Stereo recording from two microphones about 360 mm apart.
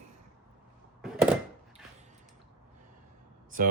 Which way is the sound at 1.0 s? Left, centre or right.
Centre.